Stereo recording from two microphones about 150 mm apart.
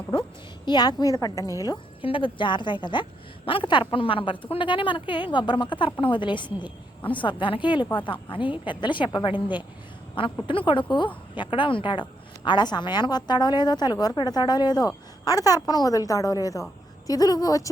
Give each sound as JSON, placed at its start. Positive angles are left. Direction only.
{"t": 0.1, "sound": "a woman's voice", "side_deg": 30}
{"t": 9.3, "sound": "a woman's voice", "side_deg": -10}
{"t": 10.4, "sound": "a woman's voice", "side_deg": 35}